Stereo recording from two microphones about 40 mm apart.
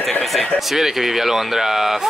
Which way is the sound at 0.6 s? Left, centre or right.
Centre.